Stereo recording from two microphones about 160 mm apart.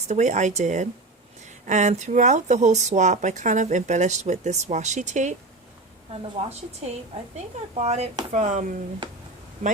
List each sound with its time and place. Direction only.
0.1 s speech: 45° right (ahead or behind)
7.3 s speech: 45° right (ahead or behind)